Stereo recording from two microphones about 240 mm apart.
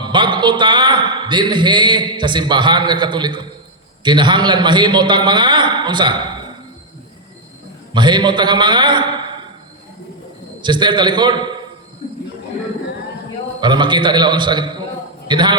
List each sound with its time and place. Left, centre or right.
0.0 s a man's voice: centre
7.9 s a man's voice: centre
10.6 s a man's voice: centre
13.6 s a man's voice: centre